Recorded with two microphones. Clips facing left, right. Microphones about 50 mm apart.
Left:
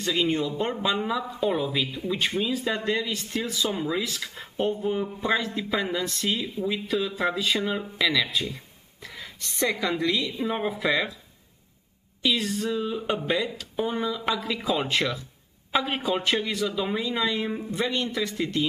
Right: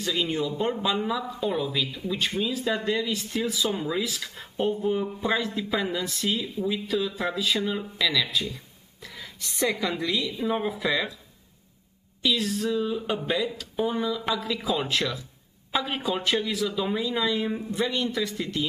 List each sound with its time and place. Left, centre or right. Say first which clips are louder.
0.1 s speech: left 2 dB; centre
7.6 s speech: left 1 dB; centre
12.2 s speech: even; centre